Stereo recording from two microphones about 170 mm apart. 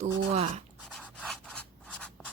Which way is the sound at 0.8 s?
5° left (ahead or behind).